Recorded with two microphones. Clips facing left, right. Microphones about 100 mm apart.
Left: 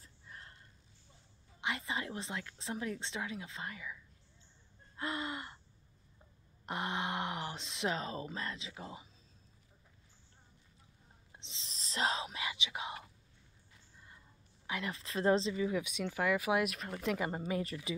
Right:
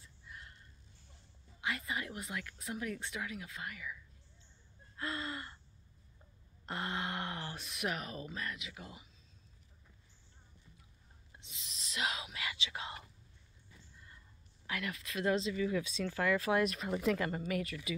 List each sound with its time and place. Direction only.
0.0 s a sound: 35° left (ahead or behind)
1.6 s a woman's voice: 25° left (ahead or behind)
4.9 s gasp: 20° left (ahead or behind)
6.6 s a sound: 20° left (ahead or behind)
11.3 s whispering: 25° left (ahead or behind)
14.7 s speech: 25° left (ahead or behind); by 16.8 s 5° left (ahead or behind)
16.8 s speech: 5° right (ahead or behind)
17.2 s a woman's voice: 25° left (ahead or behind)